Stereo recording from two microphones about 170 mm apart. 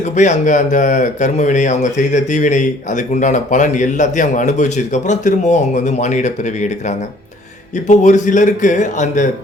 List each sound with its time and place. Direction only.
0.0 s speech: 45° left (ahead or behind)